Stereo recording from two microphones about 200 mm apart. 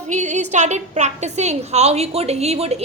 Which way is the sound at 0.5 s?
35° right (ahead or behind).